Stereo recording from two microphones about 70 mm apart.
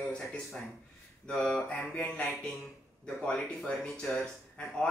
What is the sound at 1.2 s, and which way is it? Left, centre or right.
Speech, centre.